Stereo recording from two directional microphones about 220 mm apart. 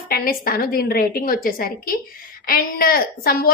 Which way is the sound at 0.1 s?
40° left (ahead or behind).